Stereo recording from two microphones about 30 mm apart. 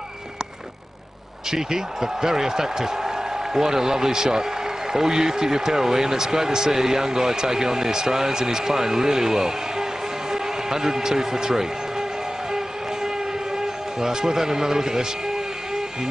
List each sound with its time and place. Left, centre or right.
1.5 s speech: centre
14.0 s speech: centre